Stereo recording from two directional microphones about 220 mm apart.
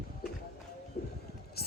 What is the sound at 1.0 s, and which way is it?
Music, 40° left (ahead or behind).